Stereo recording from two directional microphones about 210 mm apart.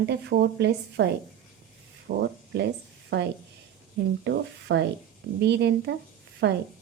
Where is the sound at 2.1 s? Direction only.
45° right (ahead or behind).